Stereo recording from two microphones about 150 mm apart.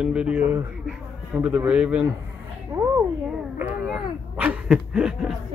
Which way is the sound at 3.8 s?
5° right (ahead or behind).